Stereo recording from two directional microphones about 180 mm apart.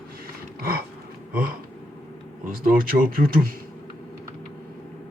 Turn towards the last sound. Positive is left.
turn(degrees=-55)  # may be behind; listen again after turning